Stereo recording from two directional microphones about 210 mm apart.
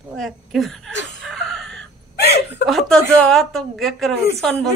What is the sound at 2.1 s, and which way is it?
Hiccup, 50° left (ahead or behind).